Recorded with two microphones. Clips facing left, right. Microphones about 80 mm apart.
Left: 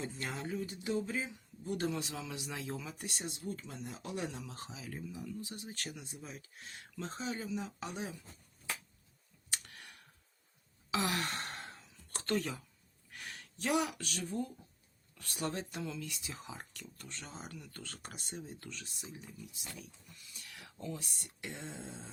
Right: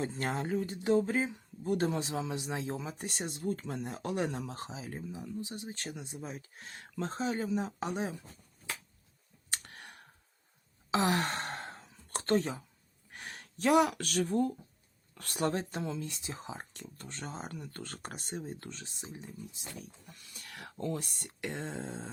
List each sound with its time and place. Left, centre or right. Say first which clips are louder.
0.0 s speech: right 6 dB; right
9.5 s clicking: right 3 dB; right
10.9 s sigh: right 6 dB; right
13.1 s speech: right 2 dB; right